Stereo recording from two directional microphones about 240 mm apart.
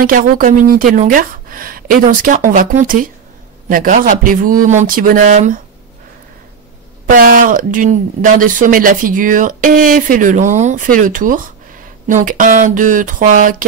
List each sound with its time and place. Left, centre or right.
0.0 s speech: right
7.1 s speech: right